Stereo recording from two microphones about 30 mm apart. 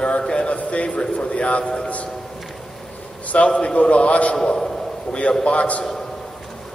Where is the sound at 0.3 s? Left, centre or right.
Left.